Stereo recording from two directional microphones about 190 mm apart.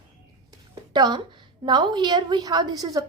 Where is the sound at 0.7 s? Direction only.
20° right (ahead or behind).